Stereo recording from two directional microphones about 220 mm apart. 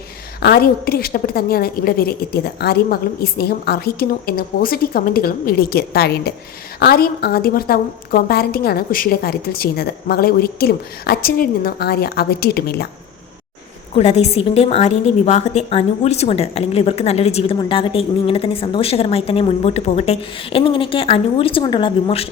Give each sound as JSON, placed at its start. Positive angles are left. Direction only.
{"t": 0.3, "sound": "a woman's voice", "side_deg": 45}
{"t": 13.9, "sound": "a woman's voice", "side_deg": 30}